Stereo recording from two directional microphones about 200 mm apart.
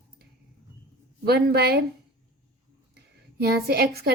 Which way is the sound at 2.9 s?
50° right (ahead or behind).